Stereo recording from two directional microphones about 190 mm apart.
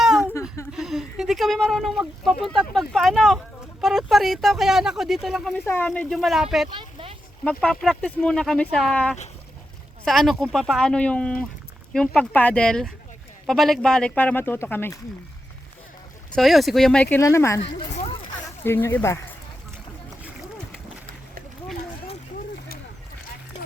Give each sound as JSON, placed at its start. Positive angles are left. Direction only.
{"t": 0.7, "sound": "a sound", "side_deg": 0}
{"t": 6.7, "sound": "a sound", "side_deg": -25}
{"t": 7.4, "sound": "speech", "side_deg": 5}
{"t": 16.3, "sound": "speech", "side_deg": 0}
{"t": 17.6, "sound": "speech", "side_deg": 30}
{"t": 18.4, "sound": "speech", "side_deg": 10}